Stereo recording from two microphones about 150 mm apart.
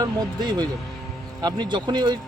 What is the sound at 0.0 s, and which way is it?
Speech, 30° right (ahead or behind).